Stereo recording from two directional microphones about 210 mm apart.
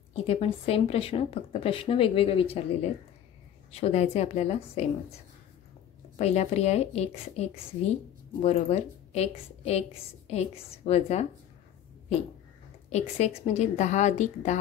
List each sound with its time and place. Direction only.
0.1 s a woman's voice: 30° left (ahead or behind)
6.1 s a woman's voice: 30° left (ahead or behind)
12.9 s a woman's voice: 30° left (ahead or behind)